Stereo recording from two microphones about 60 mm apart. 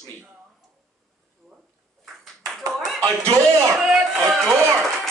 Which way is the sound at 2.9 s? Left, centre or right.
Right.